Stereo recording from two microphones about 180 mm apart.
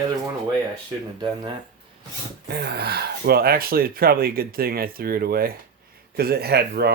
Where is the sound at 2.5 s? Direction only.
60° right (ahead or behind).